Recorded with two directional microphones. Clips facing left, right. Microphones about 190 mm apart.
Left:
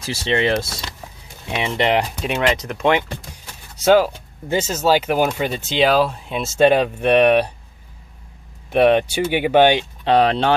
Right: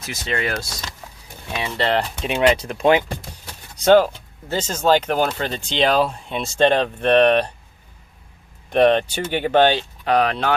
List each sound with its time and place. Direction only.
0.0 s speech: 30° left (ahead or behind)
2.3 s speech: 30° right (ahead or behind)
3.8 s speech: 5° left (ahead or behind)
8.7 s speech: 10° left (ahead or behind)
10.0 s speech: 30° left (ahead or behind)